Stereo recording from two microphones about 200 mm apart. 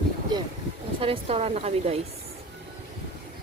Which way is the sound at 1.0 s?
30° right (ahead or behind).